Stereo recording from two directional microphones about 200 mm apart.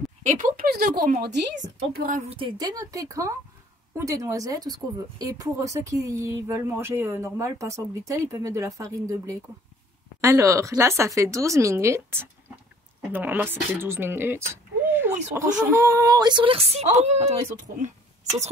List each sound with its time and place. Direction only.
0.2 s speech: 40° right (ahead or behind)
2.2 s speech: 25° right (ahead or behind)